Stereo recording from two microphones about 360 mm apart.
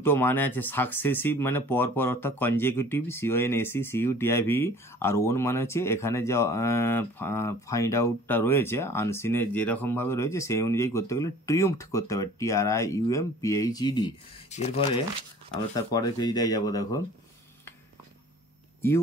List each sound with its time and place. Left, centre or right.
0.0 s speech: centre